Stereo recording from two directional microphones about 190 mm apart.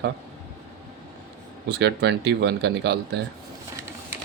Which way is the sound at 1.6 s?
60° right (ahead or behind).